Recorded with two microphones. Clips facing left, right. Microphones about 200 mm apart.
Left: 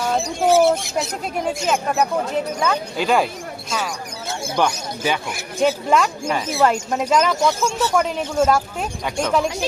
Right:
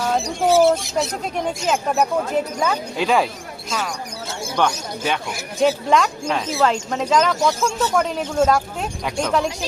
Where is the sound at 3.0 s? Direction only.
Centre (ahead or behind).